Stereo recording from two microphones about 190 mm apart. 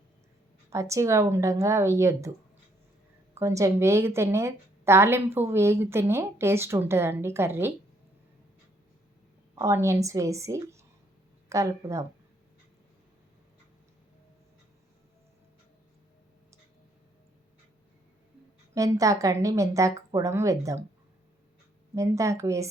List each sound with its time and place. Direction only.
0.7 s a woman's voice: 15° right (ahead or behind)
3.3 s a woman's voice: 15° right (ahead or behind)
9.6 s a woman's voice: 15° right (ahead or behind)
18.7 s a woman's voice: 15° right (ahead or behind)
21.9 s a woman's voice: 15° right (ahead or behind)